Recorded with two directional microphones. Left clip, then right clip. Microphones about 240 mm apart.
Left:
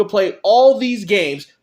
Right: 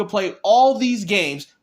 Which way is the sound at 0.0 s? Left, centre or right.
Right.